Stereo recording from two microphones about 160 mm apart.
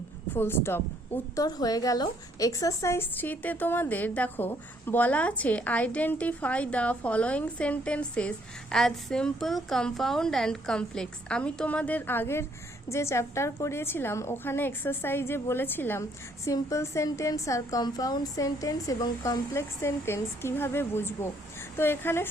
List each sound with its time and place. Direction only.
0.3 s a woman's voice: 15° left (ahead or behind)